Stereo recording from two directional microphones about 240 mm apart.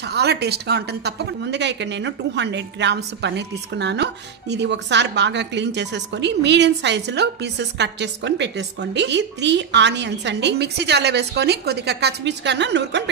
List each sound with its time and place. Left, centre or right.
0.0 s speech: right